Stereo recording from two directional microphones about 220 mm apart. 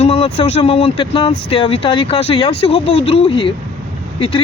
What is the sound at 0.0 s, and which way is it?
Speech, 25° left (ahead or behind).